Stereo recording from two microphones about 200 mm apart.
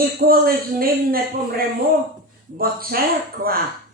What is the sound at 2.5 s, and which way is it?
Speech, 50° right (ahead or behind).